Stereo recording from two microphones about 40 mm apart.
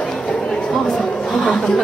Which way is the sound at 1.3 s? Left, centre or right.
Centre.